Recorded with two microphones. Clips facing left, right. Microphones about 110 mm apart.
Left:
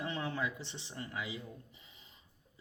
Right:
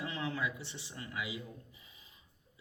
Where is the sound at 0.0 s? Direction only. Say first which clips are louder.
Even; 30° left (ahead or behind).